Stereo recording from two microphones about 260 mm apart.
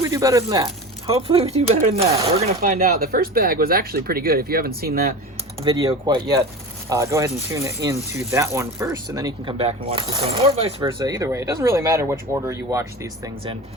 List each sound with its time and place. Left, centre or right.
0.0 s speech: centre; by 5.1 s right
5.6 s speech: centre